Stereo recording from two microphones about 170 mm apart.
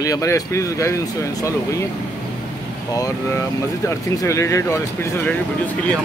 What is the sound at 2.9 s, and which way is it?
Speech, 20° left (ahead or behind).